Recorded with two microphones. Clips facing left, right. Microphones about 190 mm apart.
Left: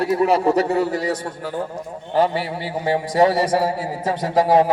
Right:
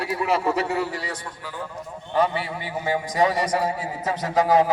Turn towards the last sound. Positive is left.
turn(degrees=30)  # may be behind; listen again after turning